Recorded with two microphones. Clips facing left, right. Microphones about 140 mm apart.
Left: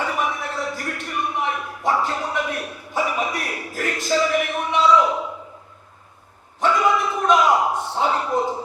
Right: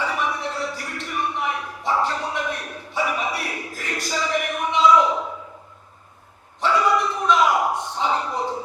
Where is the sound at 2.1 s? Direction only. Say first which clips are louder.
Left 2 dB; 45° left (ahead or behind).